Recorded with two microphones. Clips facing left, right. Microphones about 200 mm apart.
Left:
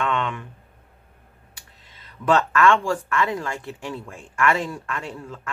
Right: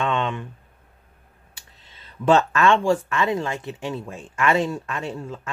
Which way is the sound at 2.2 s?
25° right (ahead or behind).